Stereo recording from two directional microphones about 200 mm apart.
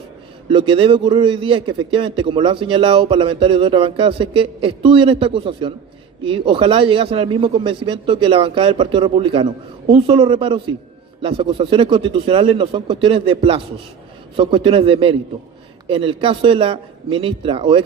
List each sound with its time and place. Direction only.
0.5 s a man's voice: 25° right (ahead or behind)